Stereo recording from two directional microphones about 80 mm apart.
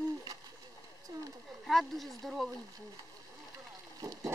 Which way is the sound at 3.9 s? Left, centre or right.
Right.